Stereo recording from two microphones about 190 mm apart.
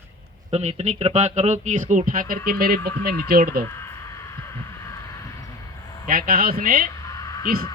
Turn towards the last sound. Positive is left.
turn(degrees=-50)  # may be behind; listen again after turning